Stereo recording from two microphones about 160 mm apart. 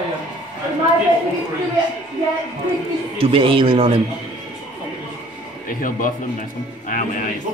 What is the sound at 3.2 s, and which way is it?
Speech, 35° right (ahead or behind).